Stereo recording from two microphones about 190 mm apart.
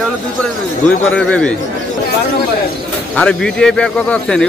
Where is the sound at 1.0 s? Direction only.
5° left (ahead or behind).